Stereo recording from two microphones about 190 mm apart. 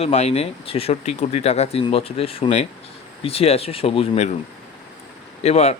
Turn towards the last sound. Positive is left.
turn(degrees=35)  # may be behind; listen again after turning